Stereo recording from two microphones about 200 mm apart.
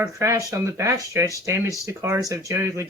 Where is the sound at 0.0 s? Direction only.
15° right (ahead or behind).